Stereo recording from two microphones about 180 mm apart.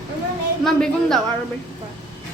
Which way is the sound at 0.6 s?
5° left (ahead or behind).